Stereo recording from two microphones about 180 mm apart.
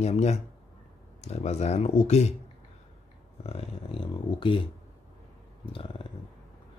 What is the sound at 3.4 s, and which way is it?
Speech, 30° left (ahead or behind).